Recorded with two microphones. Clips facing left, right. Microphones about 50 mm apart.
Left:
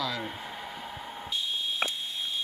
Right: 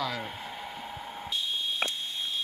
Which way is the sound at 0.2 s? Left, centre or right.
Centre.